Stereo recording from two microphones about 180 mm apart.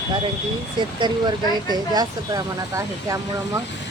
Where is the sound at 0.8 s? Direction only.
25° right (ahead or behind).